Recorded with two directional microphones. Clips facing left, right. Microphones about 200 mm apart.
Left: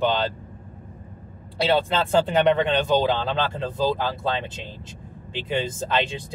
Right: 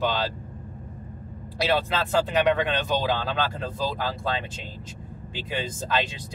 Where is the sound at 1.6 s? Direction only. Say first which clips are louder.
Left 3 dB; 30° left (ahead or behind).